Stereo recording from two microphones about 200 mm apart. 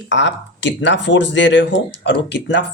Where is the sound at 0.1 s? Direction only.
65° left (ahead or behind).